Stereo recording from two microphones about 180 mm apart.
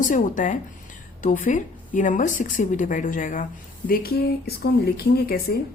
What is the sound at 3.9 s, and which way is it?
Speech, 60° left (ahead or behind).